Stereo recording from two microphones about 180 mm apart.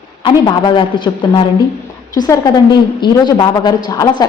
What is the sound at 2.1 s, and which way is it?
A woman's voice, 20° left (ahead or behind).